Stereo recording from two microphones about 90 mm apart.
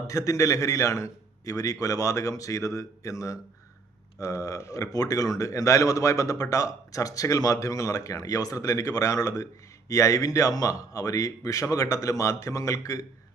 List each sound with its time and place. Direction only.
0.1 s a man's voice: 40° left (ahead or behind)